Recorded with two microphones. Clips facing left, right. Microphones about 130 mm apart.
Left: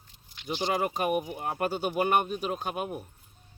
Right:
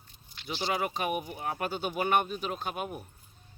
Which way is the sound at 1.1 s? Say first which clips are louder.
Left 4 dB; centre (ahead or behind).